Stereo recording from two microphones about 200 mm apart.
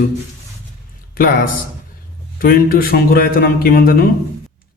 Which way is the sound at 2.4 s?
45° left (ahead or behind).